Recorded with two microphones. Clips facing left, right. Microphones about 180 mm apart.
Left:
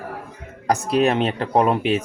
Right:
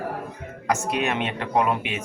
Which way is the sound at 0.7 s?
35° left (ahead or behind).